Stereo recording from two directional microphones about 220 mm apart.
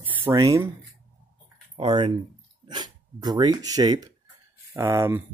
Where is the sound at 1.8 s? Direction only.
20° right (ahead or behind).